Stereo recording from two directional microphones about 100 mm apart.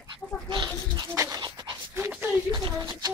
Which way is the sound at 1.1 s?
30° right (ahead or behind).